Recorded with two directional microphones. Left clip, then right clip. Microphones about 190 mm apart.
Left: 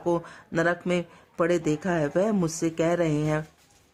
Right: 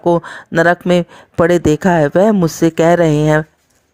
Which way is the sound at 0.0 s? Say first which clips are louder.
Right 13 dB; 40° right (ahead or behind).